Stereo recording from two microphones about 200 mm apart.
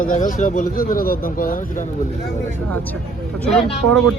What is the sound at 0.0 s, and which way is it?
Speech, 40° left (ahead or behind).